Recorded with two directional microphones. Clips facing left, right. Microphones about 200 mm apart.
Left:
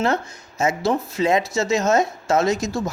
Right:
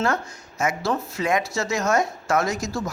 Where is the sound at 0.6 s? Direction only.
25° left (ahead or behind).